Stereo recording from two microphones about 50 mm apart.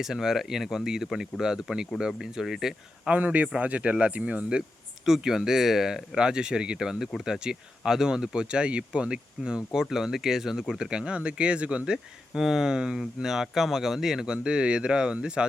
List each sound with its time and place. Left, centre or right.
0.0 s speech: centre
3.2 s speech: right
5.0 s speech: centre
12.3 s speech: centre